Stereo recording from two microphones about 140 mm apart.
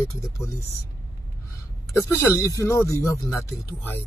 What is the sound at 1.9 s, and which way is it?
Speech, 20° left (ahead or behind).